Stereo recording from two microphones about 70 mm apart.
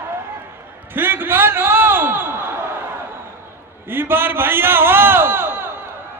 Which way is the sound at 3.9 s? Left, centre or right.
Right.